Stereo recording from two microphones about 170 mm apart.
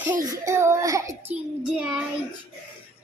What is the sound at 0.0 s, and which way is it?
A child's voice, 15° right (ahead or behind).